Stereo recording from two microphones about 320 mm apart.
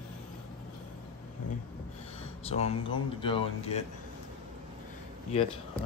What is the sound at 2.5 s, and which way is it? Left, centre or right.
Speech, centre.